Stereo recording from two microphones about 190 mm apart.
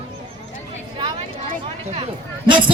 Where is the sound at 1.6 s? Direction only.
30° right (ahead or behind).